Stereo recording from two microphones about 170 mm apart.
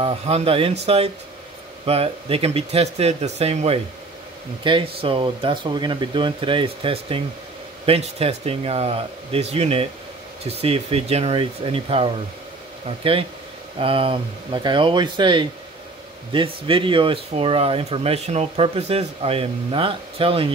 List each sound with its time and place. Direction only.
0.0 s speech: 35° right (ahead or behind)
13.7 s speech: 30° right (ahead or behind)